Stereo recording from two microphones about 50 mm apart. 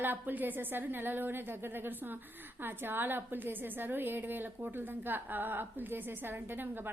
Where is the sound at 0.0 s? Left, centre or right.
Right.